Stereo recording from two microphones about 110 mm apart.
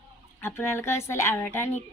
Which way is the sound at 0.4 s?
20° left (ahead or behind).